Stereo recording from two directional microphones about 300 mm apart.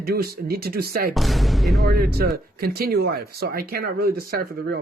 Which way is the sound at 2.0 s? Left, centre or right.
Right.